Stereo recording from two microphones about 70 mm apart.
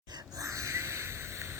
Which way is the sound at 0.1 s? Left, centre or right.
Right.